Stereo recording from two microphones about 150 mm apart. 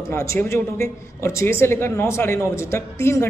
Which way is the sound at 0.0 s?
20° left (ahead or behind).